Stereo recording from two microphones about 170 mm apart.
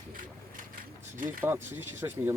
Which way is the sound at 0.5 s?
50° right (ahead or behind).